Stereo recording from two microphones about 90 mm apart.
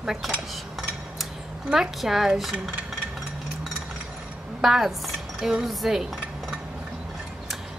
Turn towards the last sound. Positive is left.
turn(degrees=0)  # may be behind; listen again after turning